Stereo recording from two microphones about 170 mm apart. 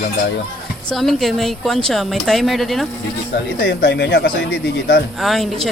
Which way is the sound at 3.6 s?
85° left.